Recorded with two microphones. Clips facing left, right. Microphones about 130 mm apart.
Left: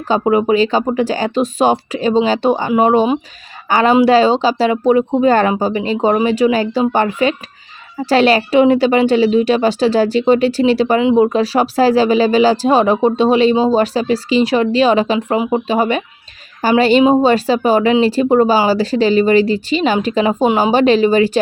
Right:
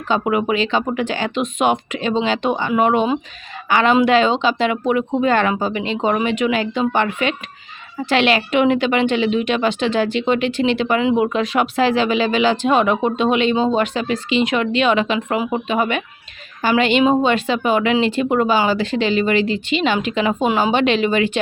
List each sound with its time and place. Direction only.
0.1 s a woman's voice: 30° left (ahead or behind)